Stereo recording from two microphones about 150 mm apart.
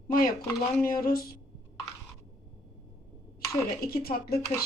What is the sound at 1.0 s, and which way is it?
Speech, 90° left.